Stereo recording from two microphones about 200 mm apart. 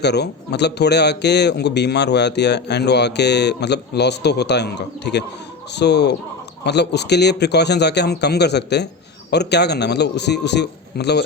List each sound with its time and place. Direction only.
0.0 s speech: 55° left (ahead or behind)